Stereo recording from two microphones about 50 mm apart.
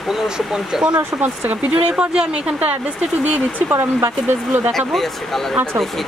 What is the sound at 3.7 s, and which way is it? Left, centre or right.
Speech, right.